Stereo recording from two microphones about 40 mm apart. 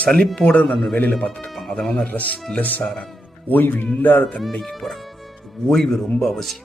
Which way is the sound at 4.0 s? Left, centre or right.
Left.